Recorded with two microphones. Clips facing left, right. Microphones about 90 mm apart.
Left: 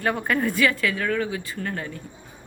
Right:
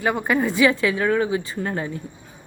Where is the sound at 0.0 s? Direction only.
10° right (ahead or behind).